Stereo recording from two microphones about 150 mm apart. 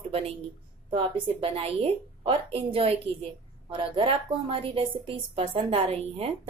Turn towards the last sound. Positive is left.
turn(degrees=-40)  # may be behind; listen again after turning